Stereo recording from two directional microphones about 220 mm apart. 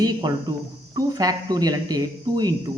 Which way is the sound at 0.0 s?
20° right (ahead or behind).